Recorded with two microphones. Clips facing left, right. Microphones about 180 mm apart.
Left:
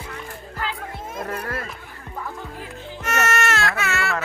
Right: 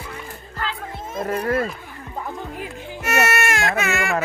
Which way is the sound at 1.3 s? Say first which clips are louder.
Right 12 dB; 30° right (ahead or behind).